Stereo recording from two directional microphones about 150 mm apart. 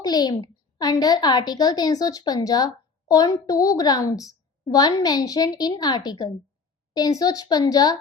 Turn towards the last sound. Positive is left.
turn(degrees=25)  # may be behind; listen again after turning